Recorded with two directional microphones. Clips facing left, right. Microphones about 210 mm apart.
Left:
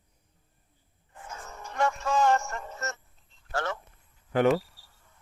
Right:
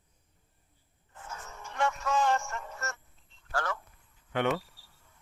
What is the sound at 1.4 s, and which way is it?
Music, 40° left (ahead or behind).